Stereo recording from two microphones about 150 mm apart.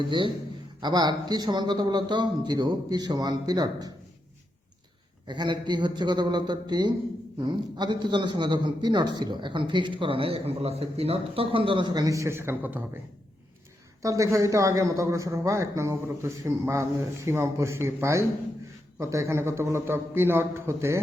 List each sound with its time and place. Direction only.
0.8 s a man's voice: 30° right (ahead or behind)
5.3 s a man's voice: 30° right (ahead or behind); by 12.8 s 15° right (ahead or behind)
14.0 s a man's voice: 20° right (ahead or behind)